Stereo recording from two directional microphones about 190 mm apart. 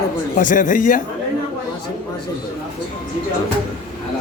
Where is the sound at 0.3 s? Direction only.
45° left (ahead or behind).